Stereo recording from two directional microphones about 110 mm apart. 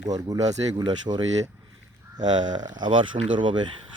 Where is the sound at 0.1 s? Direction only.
35° right (ahead or behind).